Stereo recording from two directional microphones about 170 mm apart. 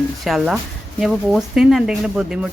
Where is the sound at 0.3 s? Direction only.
Centre (ahead or behind).